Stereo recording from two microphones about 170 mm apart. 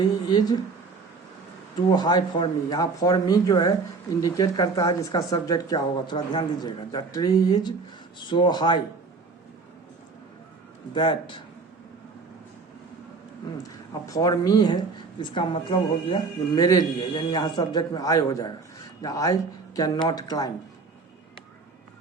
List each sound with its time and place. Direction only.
0.3 s speech: 25° left (ahead or behind)
1.9 s speech: 25° left (ahead or behind)
10.9 s speech: 30° left (ahead or behind)
14.1 s speech: 20° left (ahead or behind)